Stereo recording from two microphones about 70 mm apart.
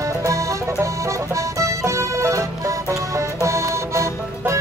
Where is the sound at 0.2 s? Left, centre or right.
Right.